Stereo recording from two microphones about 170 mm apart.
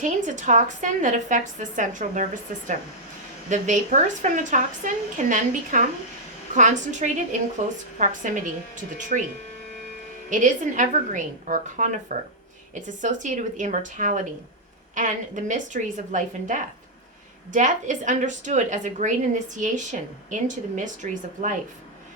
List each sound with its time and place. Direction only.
0.0 s a woman's voice: 45° right (ahead or behind)
10.2 s a woman's voice: 50° right (ahead or behind)